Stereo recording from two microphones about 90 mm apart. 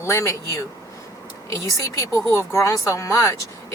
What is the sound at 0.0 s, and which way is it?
Speech, 30° left (ahead or behind).